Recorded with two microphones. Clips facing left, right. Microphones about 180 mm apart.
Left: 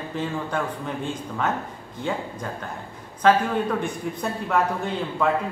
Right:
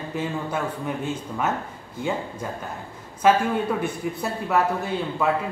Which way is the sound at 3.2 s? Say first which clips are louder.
Even; 10° right (ahead or behind).